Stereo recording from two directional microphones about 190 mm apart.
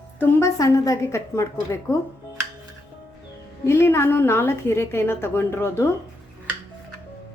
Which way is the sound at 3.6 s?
15° left (ahead or behind).